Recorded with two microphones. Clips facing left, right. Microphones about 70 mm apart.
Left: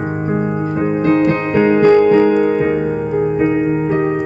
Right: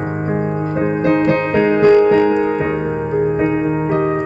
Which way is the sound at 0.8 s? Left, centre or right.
Right.